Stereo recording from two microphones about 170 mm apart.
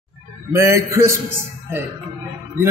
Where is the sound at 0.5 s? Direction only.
15° right (ahead or behind).